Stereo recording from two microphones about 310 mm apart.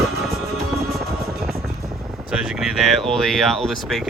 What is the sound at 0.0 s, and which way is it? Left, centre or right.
Music, centre.